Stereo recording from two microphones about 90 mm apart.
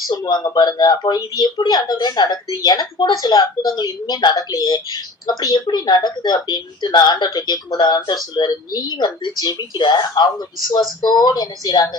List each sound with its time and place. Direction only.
0.1 s a woman's voice: 50° left (ahead or behind)